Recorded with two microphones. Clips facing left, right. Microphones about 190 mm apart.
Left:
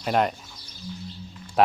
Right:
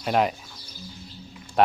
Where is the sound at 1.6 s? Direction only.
Centre (ahead or behind).